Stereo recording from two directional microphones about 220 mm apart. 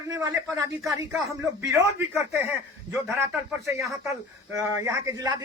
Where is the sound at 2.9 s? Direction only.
Centre (ahead or behind).